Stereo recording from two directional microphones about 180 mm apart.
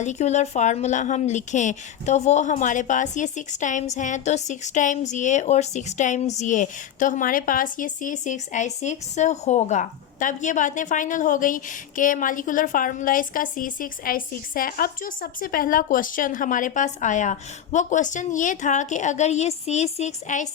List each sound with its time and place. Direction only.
0.0 s a woman's voice: 40° left (ahead or behind)